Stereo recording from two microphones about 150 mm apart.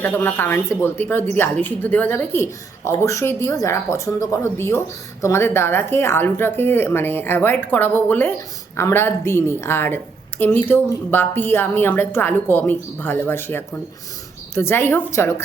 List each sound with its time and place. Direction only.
0.0 s a woman's voice: 15° left (ahead or behind)